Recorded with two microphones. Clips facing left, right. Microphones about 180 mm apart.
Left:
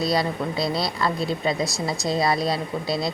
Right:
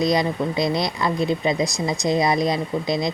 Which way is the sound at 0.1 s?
15° right (ahead or behind).